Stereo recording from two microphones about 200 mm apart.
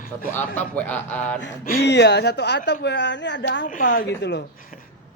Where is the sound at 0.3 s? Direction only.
10° left (ahead or behind).